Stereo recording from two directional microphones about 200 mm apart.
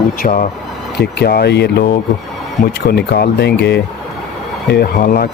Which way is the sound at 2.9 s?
55° left (ahead or behind).